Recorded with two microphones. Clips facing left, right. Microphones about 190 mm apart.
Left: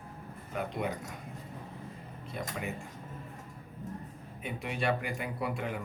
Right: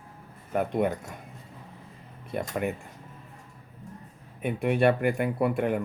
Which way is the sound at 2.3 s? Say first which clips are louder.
Right 9 dB; 55° right (ahead or behind).